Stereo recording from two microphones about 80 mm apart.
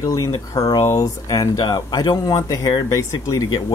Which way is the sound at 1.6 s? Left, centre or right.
Left.